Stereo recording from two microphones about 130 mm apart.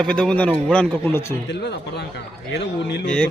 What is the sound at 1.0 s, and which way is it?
Speech, 20° left (ahead or behind).